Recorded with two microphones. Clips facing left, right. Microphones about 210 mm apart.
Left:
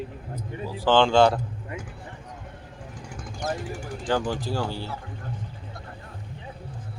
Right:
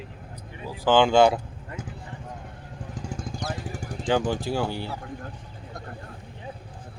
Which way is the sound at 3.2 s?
35° right (ahead or behind).